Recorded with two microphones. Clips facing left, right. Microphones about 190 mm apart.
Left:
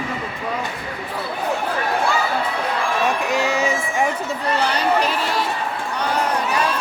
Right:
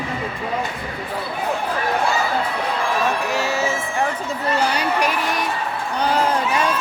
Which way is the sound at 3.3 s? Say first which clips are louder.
Left 2 dB; 15° left (ahead or behind).